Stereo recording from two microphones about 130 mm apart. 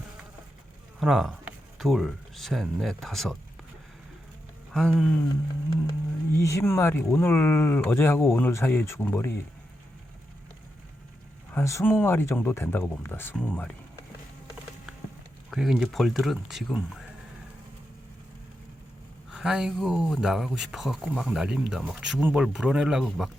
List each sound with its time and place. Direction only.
0.9 s speech: centre (ahead or behind)
4.7 s speech: 5° left (ahead or behind)
6.3 s speech: 20° left (ahead or behind)
11.5 s speech: 20° left (ahead or behind)
15.4 s speech: 5° right (ahead or behind)
19.3 s speech: 5° right (ahead or behind)